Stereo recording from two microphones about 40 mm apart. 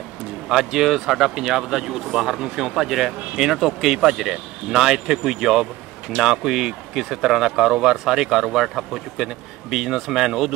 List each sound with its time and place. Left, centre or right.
0.5 s speech: centre